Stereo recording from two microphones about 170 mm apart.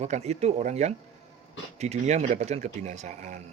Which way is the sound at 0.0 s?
40° right (ahead or behind).